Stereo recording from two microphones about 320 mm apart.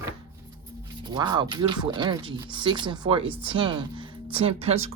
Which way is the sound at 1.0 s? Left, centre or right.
Centre.